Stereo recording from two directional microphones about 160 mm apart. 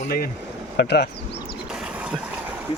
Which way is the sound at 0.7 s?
90° left.